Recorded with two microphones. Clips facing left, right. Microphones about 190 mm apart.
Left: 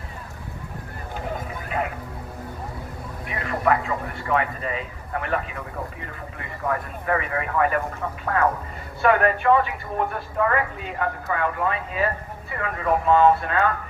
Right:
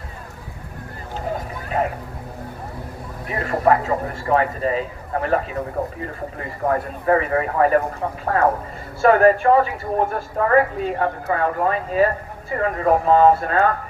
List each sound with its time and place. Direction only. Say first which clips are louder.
1.7 s music: right 5 dB; 45° right (ahead or behind)
3.2 s a woman's voice: right 5 dB; 40° right (ahead or behind)